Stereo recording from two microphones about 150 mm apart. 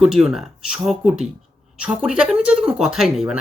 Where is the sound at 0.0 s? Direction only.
5° right (ahead or behind).